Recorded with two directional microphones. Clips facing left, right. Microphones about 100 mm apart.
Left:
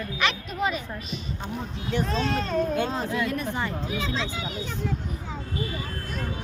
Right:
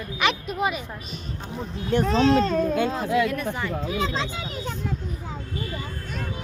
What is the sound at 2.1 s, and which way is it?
Speech, 70° right (ahead or behind).